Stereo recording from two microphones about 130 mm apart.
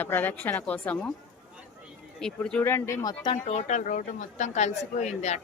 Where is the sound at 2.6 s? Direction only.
15° left (ahead or behind).